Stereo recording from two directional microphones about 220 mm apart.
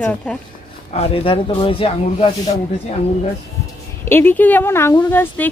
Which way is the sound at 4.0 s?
10° left (ahead or behind).